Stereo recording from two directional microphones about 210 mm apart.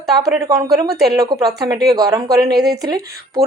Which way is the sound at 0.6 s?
15° right (ahead or behind).